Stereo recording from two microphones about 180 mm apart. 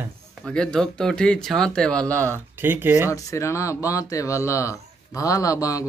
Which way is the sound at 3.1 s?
15° left (ahead or behind).